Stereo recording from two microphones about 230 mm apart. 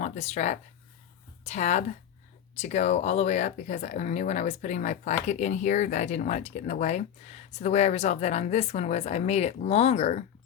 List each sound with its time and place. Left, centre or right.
0.0 s speech: left